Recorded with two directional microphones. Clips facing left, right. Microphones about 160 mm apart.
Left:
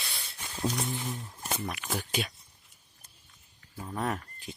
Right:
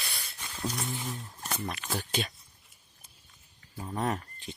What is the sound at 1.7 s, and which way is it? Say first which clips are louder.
Speech: even; 10° left (ahead or behind).